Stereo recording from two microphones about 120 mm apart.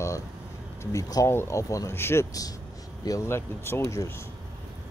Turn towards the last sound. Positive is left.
turn(degrees=20)  # may be behind; listen again after turning